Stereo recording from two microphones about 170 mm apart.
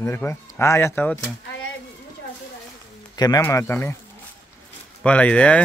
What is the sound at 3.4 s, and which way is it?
Speech, 15° left (ahead or behind).